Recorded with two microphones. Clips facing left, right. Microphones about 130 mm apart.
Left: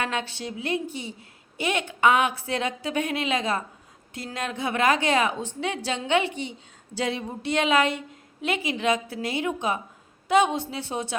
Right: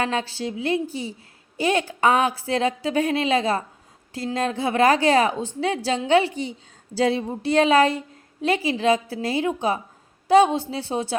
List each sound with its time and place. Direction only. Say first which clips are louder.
0.0 s a woman's voice: right 4 dB; 35° right (ahead or behind)